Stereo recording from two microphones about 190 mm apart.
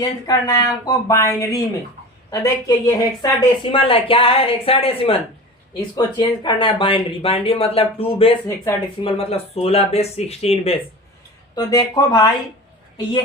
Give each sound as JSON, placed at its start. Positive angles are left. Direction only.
{"t": 0.0, "sound": "speech", "side_deg": 20}
{"t": 11.5, "sound": "speech", "side_deg": 20}